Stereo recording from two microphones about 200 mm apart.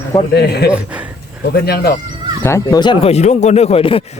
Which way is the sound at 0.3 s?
55° left (ahead or behind).